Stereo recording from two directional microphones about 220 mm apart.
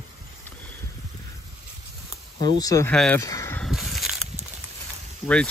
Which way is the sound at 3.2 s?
15° left (ahead or behind).